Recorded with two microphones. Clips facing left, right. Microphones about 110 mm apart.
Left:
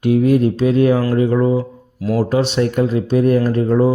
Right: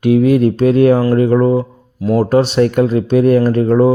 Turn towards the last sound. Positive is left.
turn(degrees=-65)  # may be behind; listen again after turning